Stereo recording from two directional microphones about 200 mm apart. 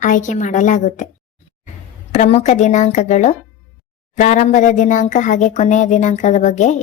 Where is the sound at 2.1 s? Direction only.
35° left (ahead or behind).